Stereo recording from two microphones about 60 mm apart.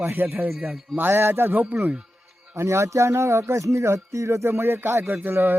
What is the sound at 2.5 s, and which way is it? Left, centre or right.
Speech, right.